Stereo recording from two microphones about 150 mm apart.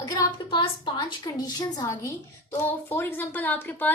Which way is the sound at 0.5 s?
35° left (ahead or behind).